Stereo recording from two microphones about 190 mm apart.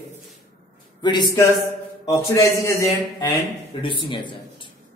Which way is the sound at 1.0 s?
25° left (ahead or behind).